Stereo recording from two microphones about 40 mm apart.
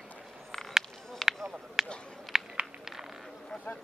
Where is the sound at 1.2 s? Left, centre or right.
Centre.